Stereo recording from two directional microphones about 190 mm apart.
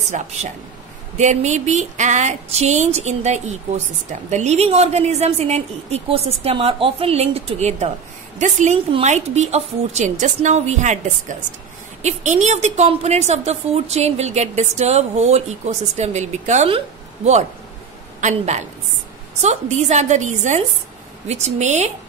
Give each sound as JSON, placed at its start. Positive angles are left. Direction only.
{"t": 0.1, "sound": "a woman's voice", "side_deg": -40}